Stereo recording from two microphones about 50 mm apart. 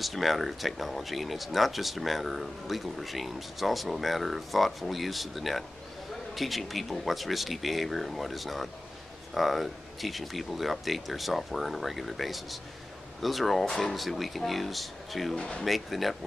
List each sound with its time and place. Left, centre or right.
0.0 s speech: centre
15.3 s speech: centre
15.6 s speech: centre